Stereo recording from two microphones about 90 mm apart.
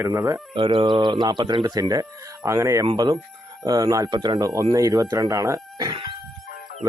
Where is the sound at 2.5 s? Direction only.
35° right (ahead or behind).